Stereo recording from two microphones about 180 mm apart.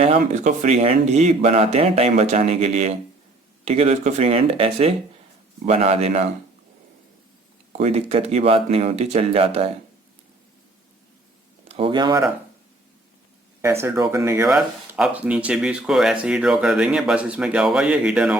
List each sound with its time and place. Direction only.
0.2 s speech: 45° right (ahead or behind)
7.7 s speech: 35° right (ahead or behind)
11.7 s speech: 30° right (ahead or behind)
13.6 s speech: 15° right (ahead or behind)
14.4 s speech: 5° right (ahead or behind)